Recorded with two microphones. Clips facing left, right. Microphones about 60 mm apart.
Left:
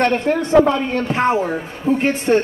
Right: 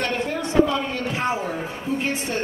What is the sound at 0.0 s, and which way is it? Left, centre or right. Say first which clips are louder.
A woman's voice: left 8 dB; left.